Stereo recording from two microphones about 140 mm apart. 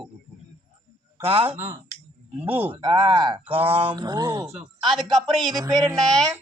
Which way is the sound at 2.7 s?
30° right (ahead or behind).